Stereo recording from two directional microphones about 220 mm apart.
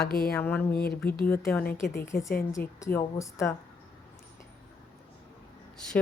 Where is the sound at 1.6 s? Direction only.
40° left (ahead or behind).